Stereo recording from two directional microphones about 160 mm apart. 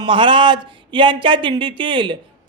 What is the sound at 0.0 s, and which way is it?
Speech, 30° right (ahead or behind).